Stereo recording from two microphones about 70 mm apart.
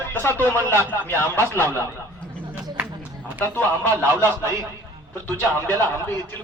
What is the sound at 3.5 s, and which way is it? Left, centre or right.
Speech, left.